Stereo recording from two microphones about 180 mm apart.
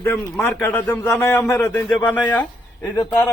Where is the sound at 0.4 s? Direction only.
10° left (ahead or behind).